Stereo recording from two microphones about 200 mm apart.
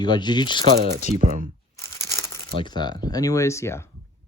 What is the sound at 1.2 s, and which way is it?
Speech, 35° right (ahead or behind).